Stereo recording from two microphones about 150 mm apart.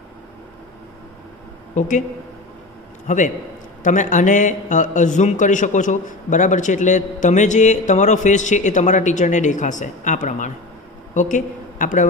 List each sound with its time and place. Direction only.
1.8 s a man's voice: 55° left (ahead or behind)
3.1 s a man's voice: 55° left (ahead or behind)